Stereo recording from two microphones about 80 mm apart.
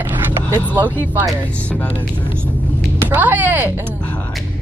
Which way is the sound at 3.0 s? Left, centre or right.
Right.